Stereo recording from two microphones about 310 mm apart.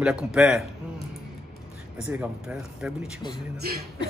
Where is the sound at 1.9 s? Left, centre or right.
Centre.